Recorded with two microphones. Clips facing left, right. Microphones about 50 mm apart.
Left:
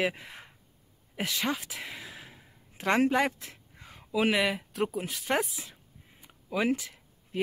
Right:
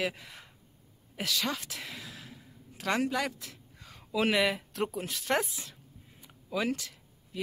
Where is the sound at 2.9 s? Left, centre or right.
Left.